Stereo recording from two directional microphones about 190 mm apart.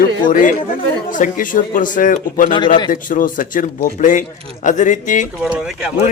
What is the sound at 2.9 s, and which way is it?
Speech, 45° left (ahead or behind).